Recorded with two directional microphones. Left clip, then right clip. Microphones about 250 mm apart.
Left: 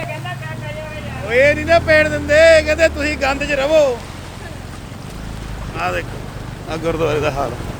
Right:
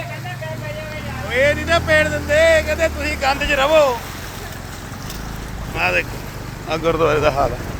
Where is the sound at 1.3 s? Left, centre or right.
Left.